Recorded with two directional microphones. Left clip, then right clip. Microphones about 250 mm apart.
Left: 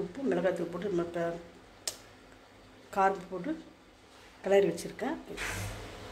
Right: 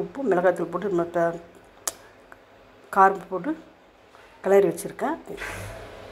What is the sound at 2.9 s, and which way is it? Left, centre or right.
Speech, centre.